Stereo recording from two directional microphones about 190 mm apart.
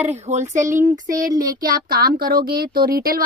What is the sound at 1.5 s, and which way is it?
Speech, 50° right (ahead or behind).